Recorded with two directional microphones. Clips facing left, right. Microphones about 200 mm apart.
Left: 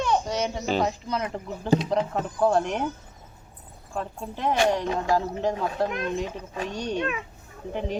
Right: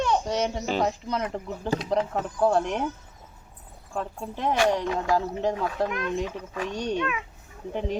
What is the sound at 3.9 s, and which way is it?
Speech, 5° left (ahead or behind).